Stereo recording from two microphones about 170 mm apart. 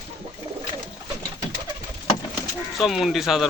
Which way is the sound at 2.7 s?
Centre (ahead or behind).